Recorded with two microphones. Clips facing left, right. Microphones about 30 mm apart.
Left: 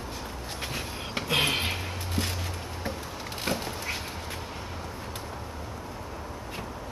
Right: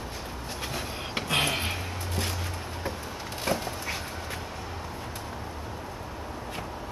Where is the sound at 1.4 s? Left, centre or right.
Left.